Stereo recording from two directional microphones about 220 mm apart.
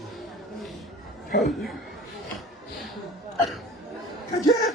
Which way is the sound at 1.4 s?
Centre (ahead or behind).